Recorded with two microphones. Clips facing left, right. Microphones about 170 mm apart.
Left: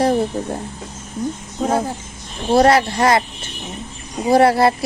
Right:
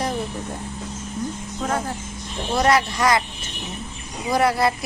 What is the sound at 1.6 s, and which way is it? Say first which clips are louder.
A woman's voice: left 6 dB; 30° left (ahead or behind).